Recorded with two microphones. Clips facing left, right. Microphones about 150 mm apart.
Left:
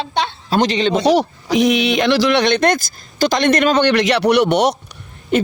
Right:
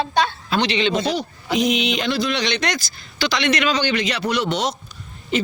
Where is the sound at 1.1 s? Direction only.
80° left.